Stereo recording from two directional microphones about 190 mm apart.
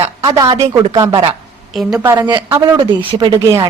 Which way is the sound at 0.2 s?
20° right (ahead or behind).